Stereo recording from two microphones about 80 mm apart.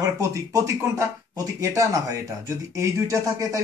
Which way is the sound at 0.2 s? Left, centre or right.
Right.